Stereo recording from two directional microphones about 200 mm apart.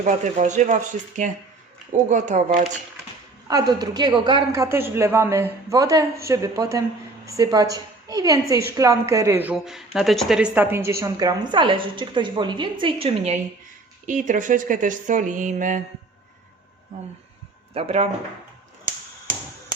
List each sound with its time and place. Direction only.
0.0 s speech: 35° right (ahead or behind)
3.5 s a woman's voice: 20° right (ahead or behind); by 15.8 s 40° right (ahead or behind)
17.7 s speech: 30° right (ahead or behind)